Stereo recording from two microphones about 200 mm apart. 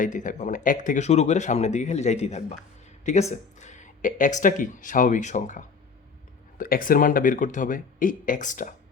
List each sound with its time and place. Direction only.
0.0 s speech: 40° left (ahead or behind)